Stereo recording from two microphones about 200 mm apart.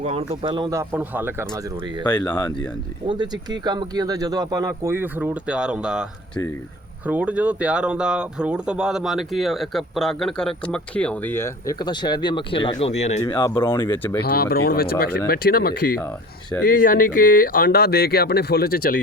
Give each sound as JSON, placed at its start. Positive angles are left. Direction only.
{"t": 0.0, "sound": "speech", "side_deg": -30}
{"t": 1.5, "sound": "speech", "side_deg": -20}
{"t": 2.0, "sound": "speech", "side_deg": 20}
{"t": 3.1, "sound": "speech", "side_deg": -20}
{"t": 13.3, "sound": "speech", "side_deg": 20}
{"t": 14.3, "sound": "speech", "side_deg": 50}